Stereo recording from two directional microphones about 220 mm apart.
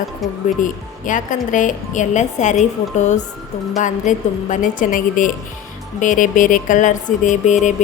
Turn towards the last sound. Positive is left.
turn(degrees=35)  # may be behind; listen again after turning